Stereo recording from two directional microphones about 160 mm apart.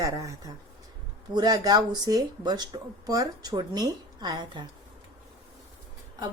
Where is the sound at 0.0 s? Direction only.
20° right (ahead or behind).